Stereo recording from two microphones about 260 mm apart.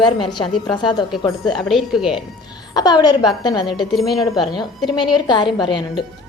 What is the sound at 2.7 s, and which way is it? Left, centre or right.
Speech, centre.